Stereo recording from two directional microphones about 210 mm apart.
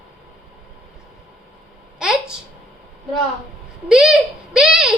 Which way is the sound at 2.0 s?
5° right (ahead or behind).